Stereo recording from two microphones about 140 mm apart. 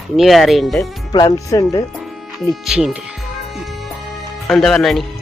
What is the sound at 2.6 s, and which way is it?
Speech, 5° right (ahead or behind).